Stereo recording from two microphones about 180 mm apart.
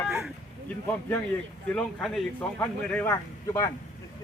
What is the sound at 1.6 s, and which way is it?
A man's voice, centre (ahead or behind).